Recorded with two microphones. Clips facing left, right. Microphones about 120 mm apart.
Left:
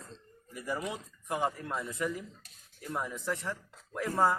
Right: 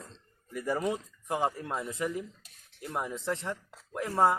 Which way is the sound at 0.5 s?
50° right (ahead or behind).